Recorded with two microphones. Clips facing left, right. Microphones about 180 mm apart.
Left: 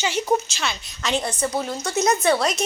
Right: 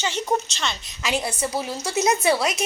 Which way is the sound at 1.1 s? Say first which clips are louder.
Left 1 dB; 10° right (ahead or behind).